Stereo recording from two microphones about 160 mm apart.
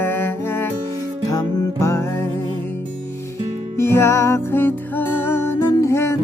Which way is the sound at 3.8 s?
15° left (ahead or behind).